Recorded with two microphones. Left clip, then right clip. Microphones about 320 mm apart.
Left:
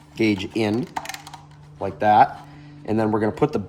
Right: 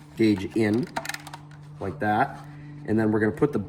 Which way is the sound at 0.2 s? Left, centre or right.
Centre.